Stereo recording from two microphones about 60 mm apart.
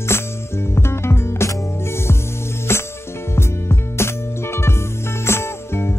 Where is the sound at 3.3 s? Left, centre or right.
Left.